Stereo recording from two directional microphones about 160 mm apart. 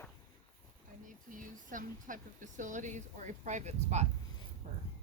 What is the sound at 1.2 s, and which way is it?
Speech, 55° right (ahead or behind).